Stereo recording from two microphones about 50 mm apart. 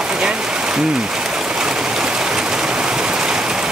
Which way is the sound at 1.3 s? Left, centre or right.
Centre.